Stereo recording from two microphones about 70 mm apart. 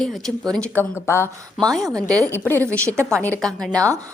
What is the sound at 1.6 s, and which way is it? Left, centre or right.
Speech, centre.